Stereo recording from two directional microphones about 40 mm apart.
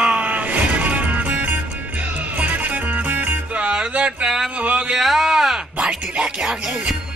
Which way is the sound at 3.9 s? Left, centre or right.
Right.